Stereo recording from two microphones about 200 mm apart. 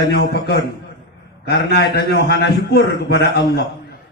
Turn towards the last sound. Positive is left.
turn(degrees=55)  # may be behind; listen again after turning